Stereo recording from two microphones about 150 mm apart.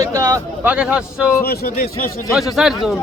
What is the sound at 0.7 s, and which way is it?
Speech, 10° right (ahead or behind).